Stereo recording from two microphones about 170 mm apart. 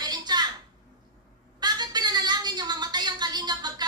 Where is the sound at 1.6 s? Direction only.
25° right (ahead or behind).